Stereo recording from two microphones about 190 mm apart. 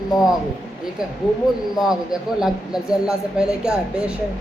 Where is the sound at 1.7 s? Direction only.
Centre (ahead or behind).